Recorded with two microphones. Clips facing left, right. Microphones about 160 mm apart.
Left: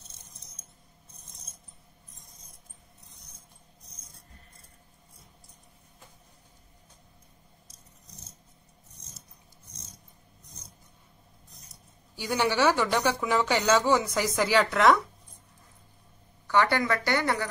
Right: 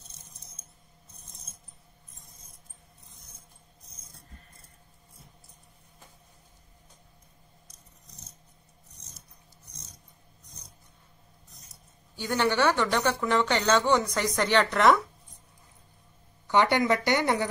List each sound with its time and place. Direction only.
12.2 s a woman's voice: 10° left (ahead or behind)
16.4 s speech: 20° right (ahead or behind)